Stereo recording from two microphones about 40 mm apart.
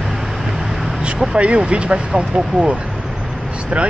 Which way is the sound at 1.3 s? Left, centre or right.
Right.